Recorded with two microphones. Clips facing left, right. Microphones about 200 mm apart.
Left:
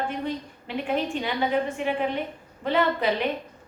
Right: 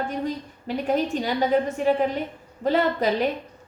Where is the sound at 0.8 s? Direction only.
40° right (ahead or behind).